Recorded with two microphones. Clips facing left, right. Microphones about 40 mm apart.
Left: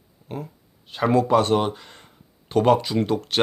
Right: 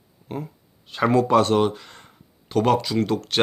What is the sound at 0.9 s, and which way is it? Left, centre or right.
Speech, centre.